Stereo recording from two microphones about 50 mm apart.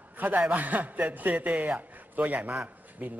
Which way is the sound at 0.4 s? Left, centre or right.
Right.